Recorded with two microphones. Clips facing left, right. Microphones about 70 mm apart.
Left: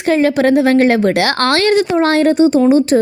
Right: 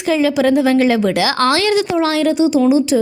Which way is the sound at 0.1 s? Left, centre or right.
Left.